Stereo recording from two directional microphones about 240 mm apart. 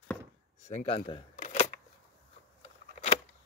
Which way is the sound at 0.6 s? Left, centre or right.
Left.